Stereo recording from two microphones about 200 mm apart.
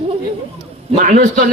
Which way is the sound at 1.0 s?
40° right (ahead or behind).